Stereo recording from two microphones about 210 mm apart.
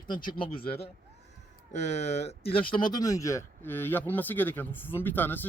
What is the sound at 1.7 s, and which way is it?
Speech, 35° left (ahead or behind).